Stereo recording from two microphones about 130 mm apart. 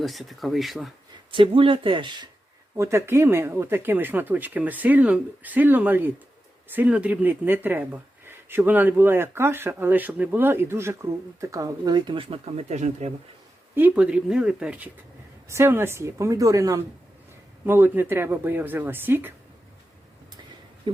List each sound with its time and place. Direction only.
0.0 s speech: centre (ahead or behind)
1.3 s speech: 40° right (ahead or behind)
2.7 s speech: 20° right (ahead or behind); by 13.1 s 60° right (ahead or behind)
13.7 s speech: 10° right (ahead or behind)
15.4 s speech: 20° right (ahead or behind)
20.9 s speech: 40° right (ahead or behind)